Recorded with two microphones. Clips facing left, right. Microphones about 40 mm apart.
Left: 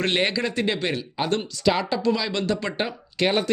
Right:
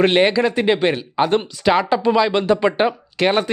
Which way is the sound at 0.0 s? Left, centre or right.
Centre.